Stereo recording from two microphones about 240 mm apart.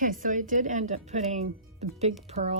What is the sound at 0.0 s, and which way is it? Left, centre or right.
Speech, right.